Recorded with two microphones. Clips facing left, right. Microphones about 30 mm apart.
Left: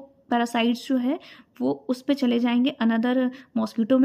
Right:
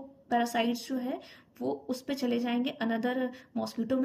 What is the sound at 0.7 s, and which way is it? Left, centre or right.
Speech, left.